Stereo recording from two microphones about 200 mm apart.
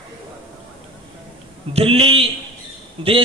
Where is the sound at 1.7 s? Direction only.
30° right (ahead or behind).